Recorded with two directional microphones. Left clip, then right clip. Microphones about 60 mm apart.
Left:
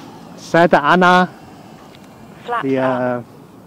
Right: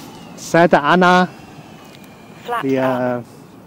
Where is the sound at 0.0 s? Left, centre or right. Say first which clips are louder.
Right 1 dB; right.